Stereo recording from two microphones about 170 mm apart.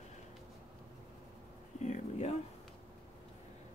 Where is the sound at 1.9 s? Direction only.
40° left (ahead or behind).